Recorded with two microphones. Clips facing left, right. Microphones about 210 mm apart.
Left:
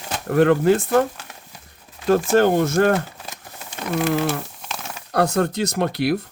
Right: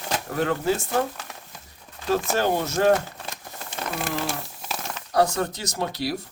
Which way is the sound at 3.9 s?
60° left (ahead or behind).